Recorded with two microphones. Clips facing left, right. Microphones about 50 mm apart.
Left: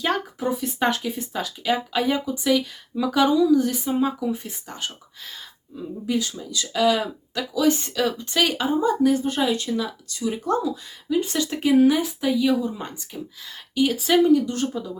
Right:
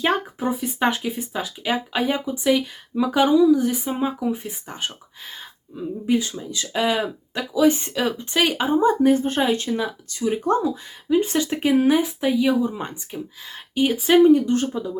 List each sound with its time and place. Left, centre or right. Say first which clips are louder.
0.0 s speech: right 2 dB; right